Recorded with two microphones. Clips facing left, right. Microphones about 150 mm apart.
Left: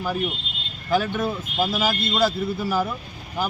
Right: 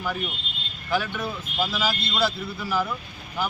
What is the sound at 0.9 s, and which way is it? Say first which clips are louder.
Speech: left 4 dB; 45° left (ahead or behind).